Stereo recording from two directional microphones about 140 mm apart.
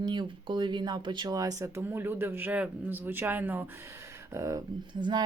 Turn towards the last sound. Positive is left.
turn(degrees=-35)  # may be behind; listen again after turning